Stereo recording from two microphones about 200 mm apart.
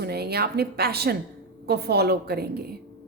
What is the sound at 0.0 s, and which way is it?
A woman's voice, 50° right (ahead or behind).